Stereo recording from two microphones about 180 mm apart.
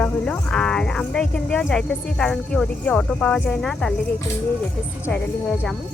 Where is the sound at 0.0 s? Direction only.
5° left (ahead or behind).